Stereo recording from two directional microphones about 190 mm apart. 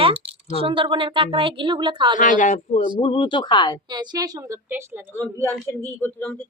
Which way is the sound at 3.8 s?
20° right (ahead or behind).